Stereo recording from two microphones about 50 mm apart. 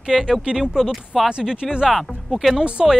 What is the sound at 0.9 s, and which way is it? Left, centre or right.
Speech, centre.